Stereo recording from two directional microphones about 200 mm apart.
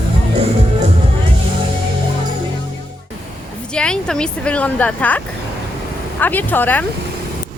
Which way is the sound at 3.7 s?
5° left (ahead or behind).